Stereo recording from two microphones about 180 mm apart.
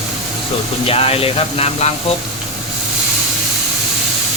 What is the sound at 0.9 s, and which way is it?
Speech, 35° left (ahead or behind).